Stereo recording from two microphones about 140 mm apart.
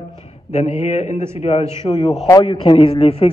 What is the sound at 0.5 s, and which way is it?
A man's voice, 50° left (ahead or behind).